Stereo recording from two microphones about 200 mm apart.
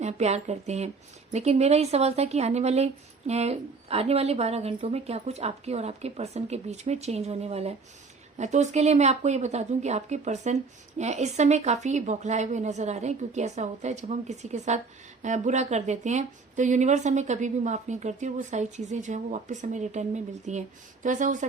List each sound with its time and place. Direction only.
0.0 s speech: 35° right (ahead or behind)